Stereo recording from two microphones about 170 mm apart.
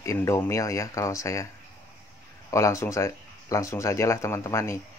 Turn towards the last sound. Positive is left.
turn(degrees=15)  # may be behind; listen again after turning